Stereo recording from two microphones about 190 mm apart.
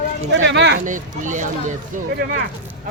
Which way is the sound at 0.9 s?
40° right (ahead or behind).